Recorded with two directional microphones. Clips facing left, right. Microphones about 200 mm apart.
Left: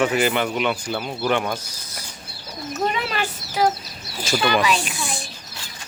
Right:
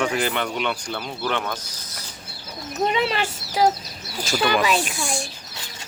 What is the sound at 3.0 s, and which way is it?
Speech, 25° right (ahead or behind).